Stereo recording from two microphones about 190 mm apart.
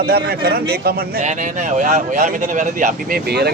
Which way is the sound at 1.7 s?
40° right (ahead or behind).